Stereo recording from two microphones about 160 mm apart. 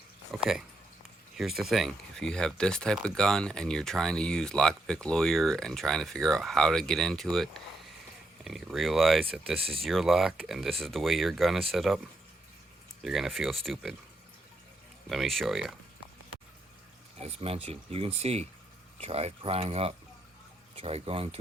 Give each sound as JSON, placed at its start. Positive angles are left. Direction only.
{"t": 0.3, "sound": "speech", "side_deg": -5}
{"t": 13.0, "sound": "speech", "side_deg": 0}
{"t": 15.1, "sound": "speech", "side_deg": 0}
{"t": 17.2, "sound": "speech", "side_deg": -40}